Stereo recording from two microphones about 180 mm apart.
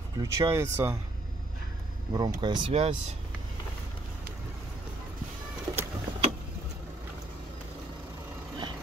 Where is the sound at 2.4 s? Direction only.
25° right (ahead or behind).